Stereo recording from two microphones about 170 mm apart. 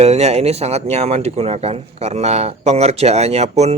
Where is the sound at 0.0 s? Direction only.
40° right (ahead or behind).